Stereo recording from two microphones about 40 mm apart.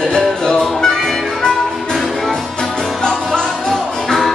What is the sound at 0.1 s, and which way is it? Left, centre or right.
Music, centre.